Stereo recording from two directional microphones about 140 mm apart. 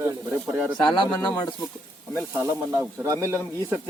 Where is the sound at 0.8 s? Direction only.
35° left (ahead or behind).